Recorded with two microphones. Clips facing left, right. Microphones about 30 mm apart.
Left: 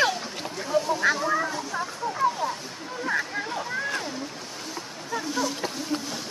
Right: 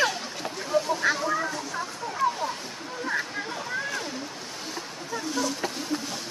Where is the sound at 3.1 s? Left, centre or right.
Centre.